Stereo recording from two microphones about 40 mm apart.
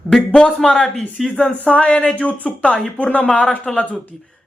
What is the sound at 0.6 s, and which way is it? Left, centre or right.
Speech, centre.